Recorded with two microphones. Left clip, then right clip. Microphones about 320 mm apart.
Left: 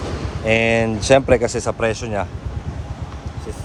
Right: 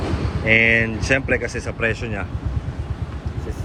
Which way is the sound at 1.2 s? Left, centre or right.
Left.